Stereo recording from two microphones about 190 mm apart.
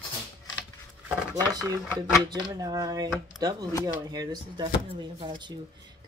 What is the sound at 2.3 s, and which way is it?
Speech, 20° right (ahead or behind).